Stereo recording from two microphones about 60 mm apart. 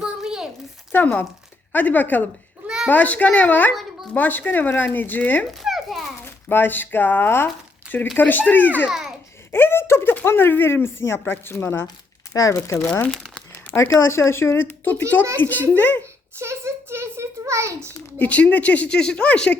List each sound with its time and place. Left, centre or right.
0.0 s a sound: centre
0.9 s a child's voice: left
2.6 s a sound: centre
2.9 s a child's voice: left
5.5 s children playing: centre
6.2 s a child's voice: left
8.9 s babbling: centre
9.5 s a child's voice: left
12.3 s speech: left
13.1 s speech: centre
13.7 s speech: left
15.4 s speech: left
16.4 s a sound: right
18.2 s speech: left